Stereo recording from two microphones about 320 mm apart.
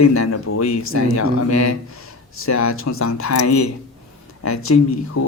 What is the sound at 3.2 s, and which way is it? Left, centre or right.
A man's voice, left.